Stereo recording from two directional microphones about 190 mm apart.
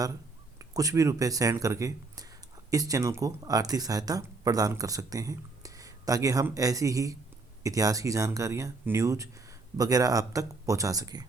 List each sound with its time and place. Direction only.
0.6 s speech: 20° right (ahead or behind)